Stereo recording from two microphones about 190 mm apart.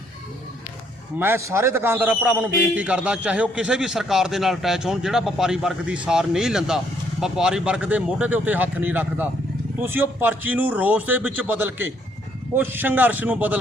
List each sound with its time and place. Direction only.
1.2 s a man's voice: 15° right (ahead or behind)